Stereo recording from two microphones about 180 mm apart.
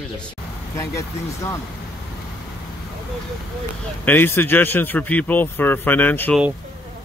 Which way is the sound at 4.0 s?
10° left (ahead or behind).